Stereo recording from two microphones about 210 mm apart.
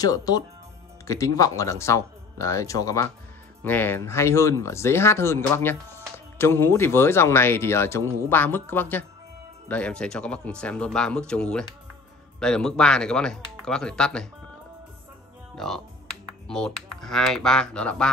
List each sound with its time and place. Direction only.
0.0 s speech: 20° left (ahead or behind)
15.5 s speech: centre (ahead or behind)